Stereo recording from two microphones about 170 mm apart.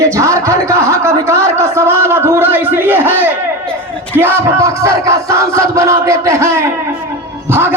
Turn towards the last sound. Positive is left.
turn(degrees=-15)  # may be behind; listen again after turning